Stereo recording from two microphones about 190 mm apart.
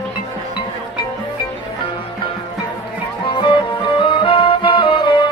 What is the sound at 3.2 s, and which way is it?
Music, 25° left (ahead or behind).